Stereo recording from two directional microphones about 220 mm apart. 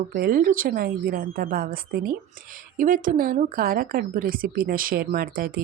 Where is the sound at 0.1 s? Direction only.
40° right (ahead or behind).